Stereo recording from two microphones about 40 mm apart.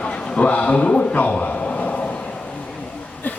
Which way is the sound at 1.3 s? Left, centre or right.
Left.